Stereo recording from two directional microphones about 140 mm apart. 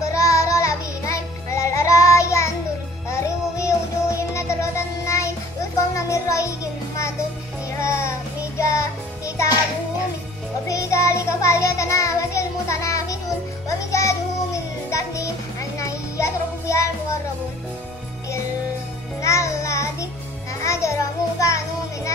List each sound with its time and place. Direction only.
0.2 s child singing: 20° left (ahead or behind)
5.8 s music: 20° left (ahead or behind)
10.7 s child singing: 20° left (ahead or behind)
13.7 s music: 20° left (ahead or behind)
19.2 s child singing: 20° left (ahead or behind)
20.6 s music: 20° left (ahead or behind)